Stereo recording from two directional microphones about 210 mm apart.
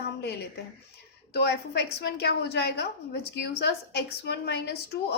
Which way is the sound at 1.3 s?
50° left (ahead or behind).